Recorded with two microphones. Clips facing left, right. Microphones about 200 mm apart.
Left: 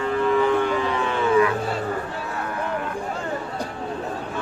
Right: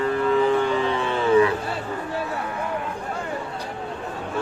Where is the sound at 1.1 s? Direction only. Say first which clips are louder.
Right 2 dB; 30° right (ahead or behind).